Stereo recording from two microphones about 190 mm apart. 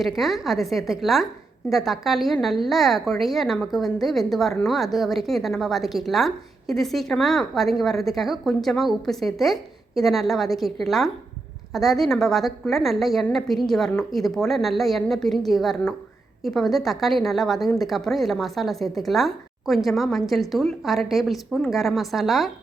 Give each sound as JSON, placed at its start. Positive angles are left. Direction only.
{"t": 0.0, "sound": "a woman's voice", "side_deg": 0}